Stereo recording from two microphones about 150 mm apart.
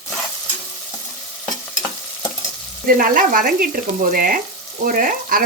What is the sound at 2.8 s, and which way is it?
Frying, 65° right (ahead or behind).